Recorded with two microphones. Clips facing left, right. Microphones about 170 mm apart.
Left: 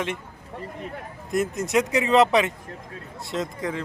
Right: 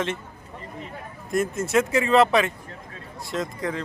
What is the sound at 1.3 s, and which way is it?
A man's voice, 20° left (ahead or behind).